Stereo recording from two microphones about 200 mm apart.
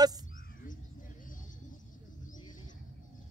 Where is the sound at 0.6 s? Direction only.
45° left (ahead or behind).